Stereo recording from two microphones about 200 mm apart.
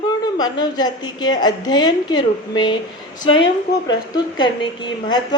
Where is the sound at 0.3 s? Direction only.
20° left (ahead or behind).